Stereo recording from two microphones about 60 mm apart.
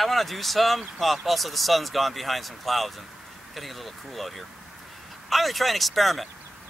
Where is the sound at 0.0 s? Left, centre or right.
Centre.